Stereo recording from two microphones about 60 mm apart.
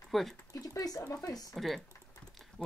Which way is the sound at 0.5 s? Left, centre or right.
Left.